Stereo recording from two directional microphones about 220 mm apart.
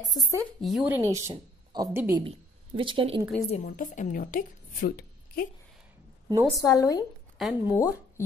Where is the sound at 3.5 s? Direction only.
35° left (ahead or behind).